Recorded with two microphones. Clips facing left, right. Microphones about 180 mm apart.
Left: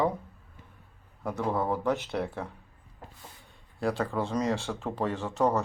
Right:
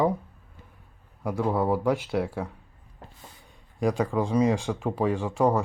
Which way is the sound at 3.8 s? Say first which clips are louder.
Right 4 dB; 15° right (ahead or behind).